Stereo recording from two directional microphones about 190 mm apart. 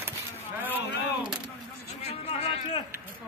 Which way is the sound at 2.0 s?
35° left (ahead or behind).